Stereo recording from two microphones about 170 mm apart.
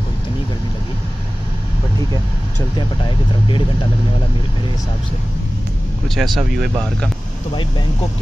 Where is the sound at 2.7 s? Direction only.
30° left (ahead or behind).